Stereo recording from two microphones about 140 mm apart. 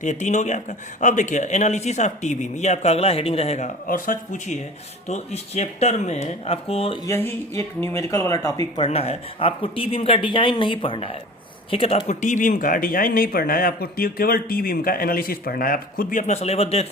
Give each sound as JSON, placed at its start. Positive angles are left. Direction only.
{"t": 0.0, "sound": "a man's voice", "side_deg": 55}
{"t": 3.8, "sound": "speech", "side_deg": 75}
{"t": 7.0, "sound": "speech", "side_deg": 15}
{"t": 8.7, "sound": "speech", "side_deg": 45}
{"t": 12.0, "sound": "speech", "side_deg": 60}